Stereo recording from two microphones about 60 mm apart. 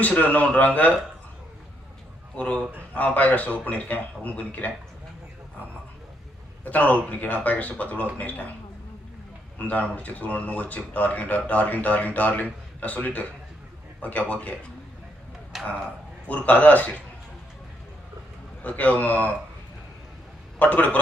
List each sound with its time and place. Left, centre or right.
0.0 s speech: left
2.3 s speech: left
6.7 s speech: left
9.6 s speech: left
15.5 s speech: centre
16.3 s speech: left
18.6 s speech: left
20.6 s speech: left